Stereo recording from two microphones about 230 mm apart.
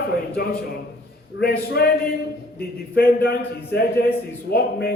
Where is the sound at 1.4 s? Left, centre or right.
Left.